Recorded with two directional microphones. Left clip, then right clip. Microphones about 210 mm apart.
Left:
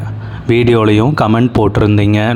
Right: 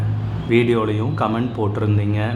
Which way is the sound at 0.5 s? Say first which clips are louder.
Left 8 dB; 45° left (ahead or behind).